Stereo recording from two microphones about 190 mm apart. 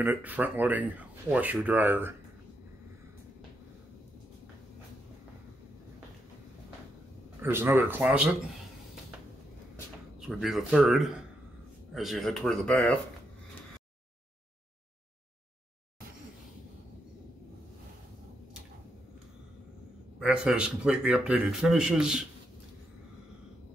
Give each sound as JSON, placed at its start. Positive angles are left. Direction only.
{"t": 0.0, "sound": "speech", "side_deg": -10}
{"t": 7.4, "sound": "speech", "side_deg": -10}
{"t": 10.2, "sound": "speech", "side_deg": 0}
{"t": 20.2, "sound": "speech", "side_deg": -5}